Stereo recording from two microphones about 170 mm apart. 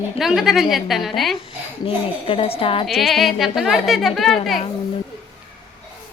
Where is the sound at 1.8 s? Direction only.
30° left (ahead or behind).